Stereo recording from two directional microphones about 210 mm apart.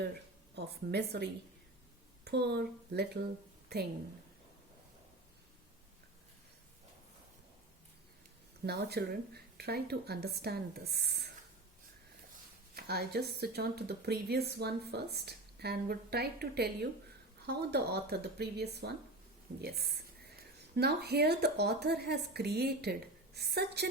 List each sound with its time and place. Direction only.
0.5 s speech: 50° right (ahead or behind)
8.6 s speech: 50° right (ahead or behind)
12.7 s speech: 50° right (ahead or behind)